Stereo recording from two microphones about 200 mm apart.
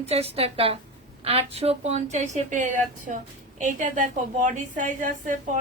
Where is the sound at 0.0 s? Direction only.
30° right (ahead or behind).